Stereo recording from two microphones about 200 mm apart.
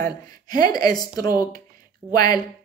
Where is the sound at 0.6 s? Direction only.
20° left (ahead or behind).